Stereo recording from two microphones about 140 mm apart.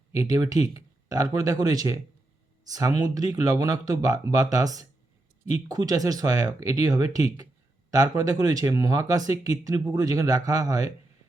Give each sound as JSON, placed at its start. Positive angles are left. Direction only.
{"t": 0.1, "sound": "speech", "side_deg": -25}